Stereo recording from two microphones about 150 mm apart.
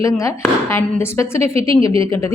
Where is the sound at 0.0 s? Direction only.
20° left (ahead or behind).